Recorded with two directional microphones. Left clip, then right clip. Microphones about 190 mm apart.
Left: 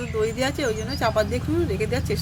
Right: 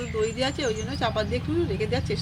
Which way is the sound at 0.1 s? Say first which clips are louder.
Left 2 dB; 10° left (ahead or behind).